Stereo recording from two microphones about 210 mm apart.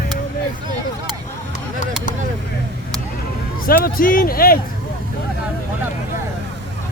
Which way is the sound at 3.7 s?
45° left (ahead or behind).